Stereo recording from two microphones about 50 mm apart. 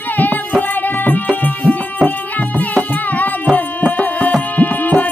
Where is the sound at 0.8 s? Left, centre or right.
Left.